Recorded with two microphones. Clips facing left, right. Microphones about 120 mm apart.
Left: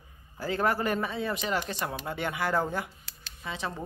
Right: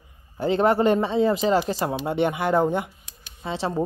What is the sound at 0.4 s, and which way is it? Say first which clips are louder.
A man's voice: right 8 dB; 25° right (ahead or behind).